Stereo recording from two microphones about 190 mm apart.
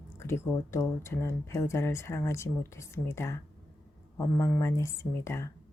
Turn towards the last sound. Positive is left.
turn(degrees=15)  # may be behind; listen again after turning